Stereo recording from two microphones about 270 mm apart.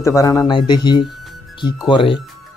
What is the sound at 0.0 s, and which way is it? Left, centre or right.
Speech, centre.